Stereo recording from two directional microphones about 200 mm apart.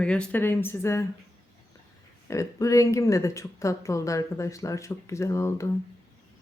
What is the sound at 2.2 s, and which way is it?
Speech, 15° left (ahead or behind).